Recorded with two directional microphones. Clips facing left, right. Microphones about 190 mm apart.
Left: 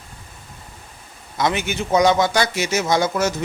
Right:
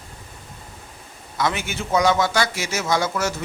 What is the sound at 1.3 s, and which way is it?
A man's voice, 20° left (ahead or behind).